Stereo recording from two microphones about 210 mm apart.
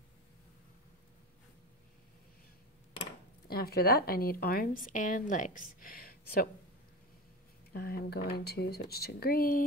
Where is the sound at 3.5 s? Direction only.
50° left (ahead or behind).